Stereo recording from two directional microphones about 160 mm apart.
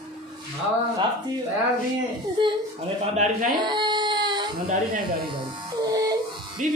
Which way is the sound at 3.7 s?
30° right (ahead or behind).